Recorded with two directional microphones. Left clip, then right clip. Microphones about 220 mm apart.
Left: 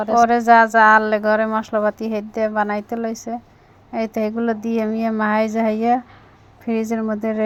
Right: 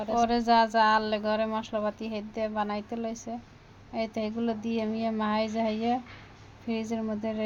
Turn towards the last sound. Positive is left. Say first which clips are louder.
# left 10 dB
turn(degrees=20)  # may be behind; listen again after turning